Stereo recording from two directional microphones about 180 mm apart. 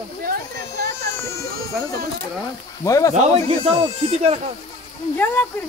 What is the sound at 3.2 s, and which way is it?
Speech, 35° right (ahead or behind).